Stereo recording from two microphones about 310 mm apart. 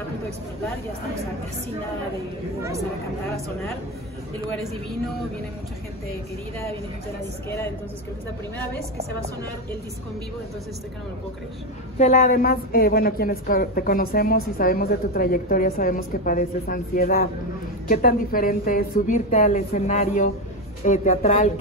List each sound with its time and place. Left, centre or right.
7.4 s a woman's voice: centre
12.0 s a woman's voice: left